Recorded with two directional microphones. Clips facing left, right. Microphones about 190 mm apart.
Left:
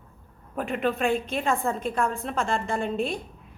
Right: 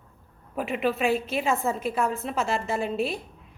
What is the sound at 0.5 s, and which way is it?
A woman's voice, 5° right (ahead or behind).